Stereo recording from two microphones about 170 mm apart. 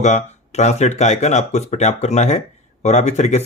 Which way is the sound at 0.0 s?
45° left (ahead or behind).